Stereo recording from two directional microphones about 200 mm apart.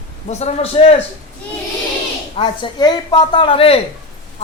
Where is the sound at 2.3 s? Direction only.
25° left (ahead or behind).